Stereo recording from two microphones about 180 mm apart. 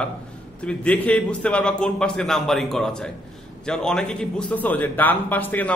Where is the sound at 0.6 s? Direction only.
5° left (ahead or behind).